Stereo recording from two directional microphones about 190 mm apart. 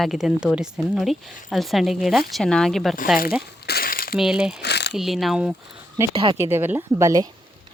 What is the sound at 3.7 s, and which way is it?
Crumpling, 50° left (ahead or behind).